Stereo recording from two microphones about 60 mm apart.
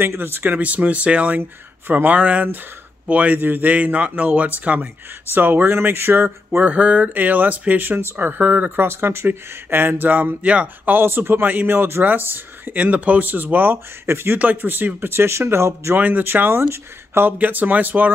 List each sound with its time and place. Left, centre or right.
0.0 s speech: right
1.4 s speech: right
2.1 s speech: right
6.7 s speech: right
10.9 s speech: right
14.4 s speech: right
16.0 s speech: right